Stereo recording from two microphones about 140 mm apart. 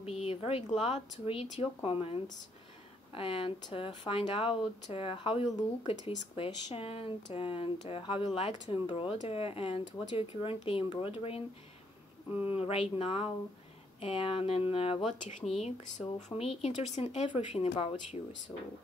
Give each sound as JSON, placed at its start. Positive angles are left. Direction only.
{"t": 0.0, "sound": "speech", "side_deg": 45}
{"t": 3.2, "sound": "speech", "side_deg": 40}
{"t": 12.3, "sound": "speech", "side_deg": -15}
{"t": 12.5, "sound": "speech", "side_deg": 45}
{"t": 15.1, "sound": "speech", "side_deg": 60}
{"t": 16.3, "sound": "speech", "side_deg": 45}